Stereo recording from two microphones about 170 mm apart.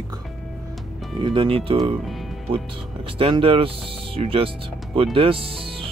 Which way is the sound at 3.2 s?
30° right (ahead or behind).